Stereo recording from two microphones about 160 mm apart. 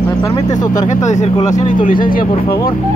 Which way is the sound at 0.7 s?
50° left (ahead or behind).